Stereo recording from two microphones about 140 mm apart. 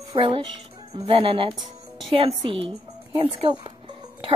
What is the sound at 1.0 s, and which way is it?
Speech, 40° right (ahead or behind).